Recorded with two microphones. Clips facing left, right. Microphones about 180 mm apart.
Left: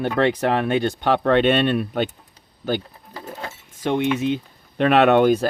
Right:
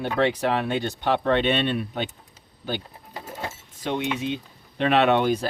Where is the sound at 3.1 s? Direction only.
25° right (ahead or behind).